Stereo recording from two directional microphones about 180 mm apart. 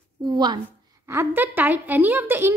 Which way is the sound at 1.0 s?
15° right (ahead or behind).